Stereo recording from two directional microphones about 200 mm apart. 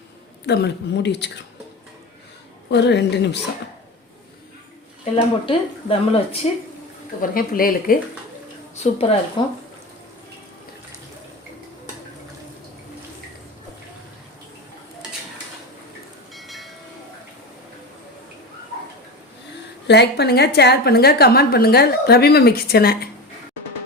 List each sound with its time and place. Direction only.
0.4 s a woman's voice: 55° left (ahead or behind)
2.6 s a woman's voice: 60° left (ahead or behind)
5.1 s speech: 30° left (ahead or behind)
7.2 s a woman's voice: 45° left (ahead or behind)
8.8 s a woman's voice: 30° left (ahead or behind)
16.3 s train: centre (ahead or behind)
19.9 s a woman's voice: 55° left (ahead or behind)